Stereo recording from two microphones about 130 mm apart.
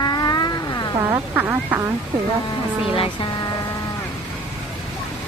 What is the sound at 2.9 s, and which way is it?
Speech, 45° left (ahead or behind).